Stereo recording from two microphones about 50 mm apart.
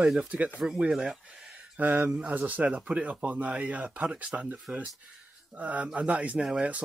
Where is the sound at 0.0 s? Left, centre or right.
Centre.